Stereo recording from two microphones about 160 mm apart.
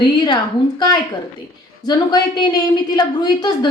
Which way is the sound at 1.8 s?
25° left (ahead or behind).